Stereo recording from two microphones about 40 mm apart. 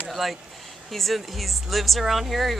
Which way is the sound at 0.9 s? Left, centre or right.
Centre.